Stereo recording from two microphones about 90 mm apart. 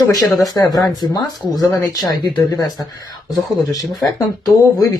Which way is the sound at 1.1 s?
45° left (ahead or behind).